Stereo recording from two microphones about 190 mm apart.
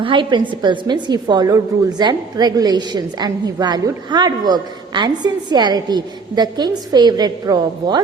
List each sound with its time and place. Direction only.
0.0 s a woman's voice: 25° right (ahead or behind)